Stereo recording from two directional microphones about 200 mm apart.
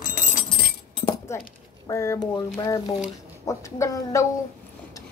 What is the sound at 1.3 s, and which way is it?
Speech, 15° left (ahead or behind).